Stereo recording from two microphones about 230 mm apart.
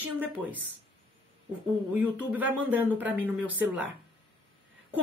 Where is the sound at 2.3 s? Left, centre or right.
Centre.